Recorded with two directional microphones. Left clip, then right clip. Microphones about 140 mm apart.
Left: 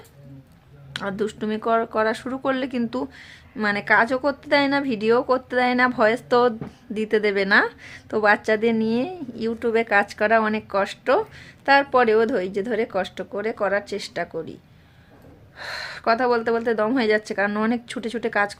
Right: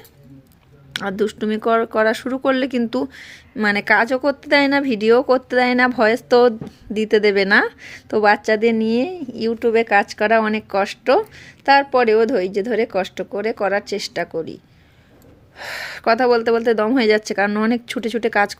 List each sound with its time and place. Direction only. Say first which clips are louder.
0.9 s a woman's voice: right 5 dB; 35° right (ahead or behind)